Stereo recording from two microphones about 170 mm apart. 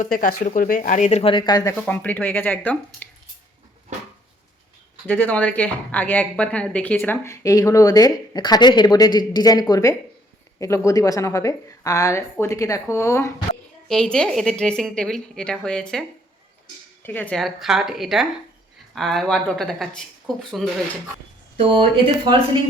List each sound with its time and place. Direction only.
0.0 s speech: 50° left (ahead or behind); by 1.7 s 25° left (ahead or behind)
1.7 s speech: 10° left (ahead or behind)
5.0 s a woman's voice: 10° left (ahead or behind)
13.8 s a woman's voice: 5° left (ahead or behind)